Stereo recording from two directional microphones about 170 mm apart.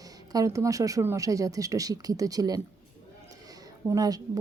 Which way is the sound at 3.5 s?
20° right (ahead or behind).